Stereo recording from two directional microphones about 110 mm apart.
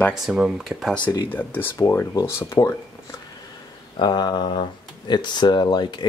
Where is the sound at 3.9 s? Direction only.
40° left (ahead or behind).